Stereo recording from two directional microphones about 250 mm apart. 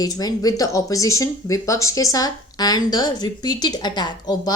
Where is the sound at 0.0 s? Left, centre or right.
Centre.